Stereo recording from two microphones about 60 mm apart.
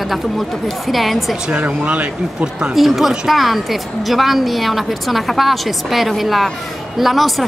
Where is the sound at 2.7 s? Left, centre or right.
Centre.